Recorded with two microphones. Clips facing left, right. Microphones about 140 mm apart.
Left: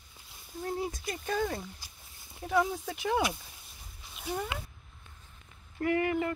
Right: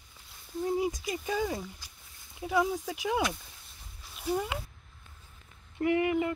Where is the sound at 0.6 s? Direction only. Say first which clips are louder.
Right 4 dB; 10° right (ahead or behind).